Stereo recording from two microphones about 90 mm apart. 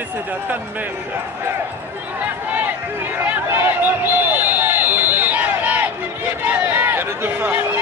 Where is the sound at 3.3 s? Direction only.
20° right (ahead or behind).